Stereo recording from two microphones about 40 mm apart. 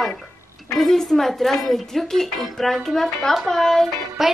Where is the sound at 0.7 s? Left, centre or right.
Centre.